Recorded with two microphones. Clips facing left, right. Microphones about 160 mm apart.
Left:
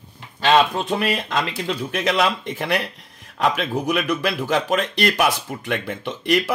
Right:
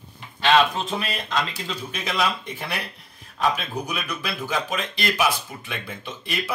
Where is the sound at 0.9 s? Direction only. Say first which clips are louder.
Left 5 dB; 65° left (ahead or behind); by 2.9 s 90° left.